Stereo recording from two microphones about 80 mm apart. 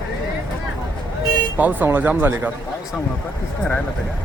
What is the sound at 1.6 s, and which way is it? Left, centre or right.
Speech, right.